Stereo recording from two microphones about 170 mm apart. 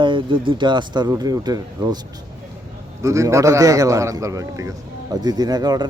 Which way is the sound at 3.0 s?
20° right (ahead or behind).